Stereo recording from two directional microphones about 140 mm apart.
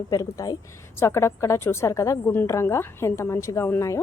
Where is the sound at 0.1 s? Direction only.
25° left (ahead or behind).